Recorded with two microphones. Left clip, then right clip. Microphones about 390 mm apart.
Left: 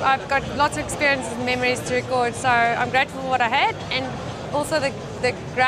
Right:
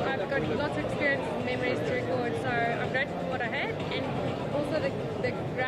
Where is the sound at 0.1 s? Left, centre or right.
Left.